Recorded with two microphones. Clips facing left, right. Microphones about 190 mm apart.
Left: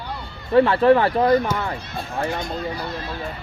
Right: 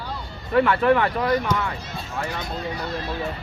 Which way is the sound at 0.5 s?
30° left (ahead or behind).